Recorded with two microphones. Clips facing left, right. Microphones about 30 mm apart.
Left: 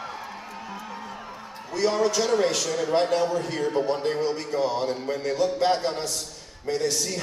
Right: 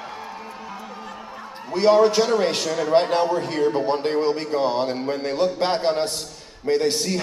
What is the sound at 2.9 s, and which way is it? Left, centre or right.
A man's voice, right.